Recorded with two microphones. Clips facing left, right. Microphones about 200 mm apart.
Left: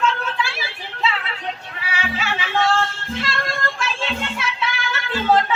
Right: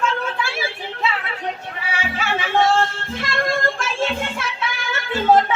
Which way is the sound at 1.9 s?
50° right (ahead or behind).